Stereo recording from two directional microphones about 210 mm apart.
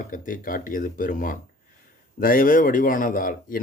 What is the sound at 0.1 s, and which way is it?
Speech, 40° left (ahead or behind).